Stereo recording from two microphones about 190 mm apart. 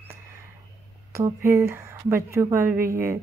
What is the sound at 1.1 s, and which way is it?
A woman's voice, 15° right (ahead or behind).